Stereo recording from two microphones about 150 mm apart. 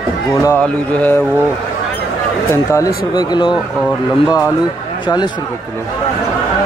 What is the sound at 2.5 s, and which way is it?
Speech, 20° left (ahead or behind).